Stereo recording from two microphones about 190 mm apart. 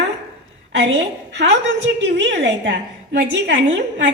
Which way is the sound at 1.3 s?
70° right (ahead or behind).